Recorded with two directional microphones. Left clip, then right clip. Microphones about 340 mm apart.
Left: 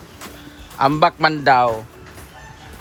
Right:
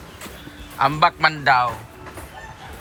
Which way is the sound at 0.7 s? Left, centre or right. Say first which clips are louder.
Left 2 dB; centre.